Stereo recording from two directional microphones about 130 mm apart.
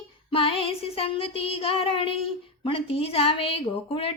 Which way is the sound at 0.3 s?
45° left (ahead or behind).